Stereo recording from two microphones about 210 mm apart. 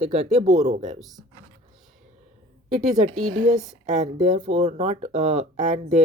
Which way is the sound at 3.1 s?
90° right.